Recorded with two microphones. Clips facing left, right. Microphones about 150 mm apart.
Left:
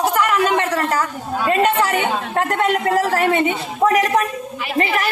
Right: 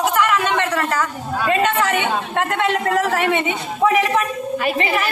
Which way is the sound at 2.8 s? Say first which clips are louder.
Left 1 dB; 35° left (ahead or behind).